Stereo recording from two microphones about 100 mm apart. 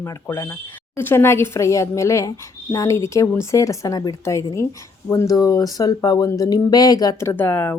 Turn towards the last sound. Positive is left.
turn(degrees=20)  # may be behind; listen again after turning